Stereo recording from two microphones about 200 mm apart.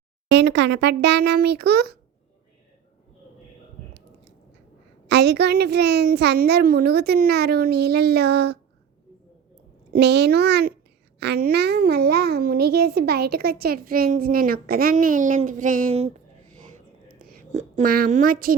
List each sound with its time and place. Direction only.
0.3 s a child's voice: 60° right (ahead or behind)
5.0 s a child's voice: 55° right (ahead or behind)
9.9 s a child's voice: 60° right (ahead or behind); by 16.1 s 30° right (ahead or behind)
16.6 s a sound: 40° right (ahead or behind)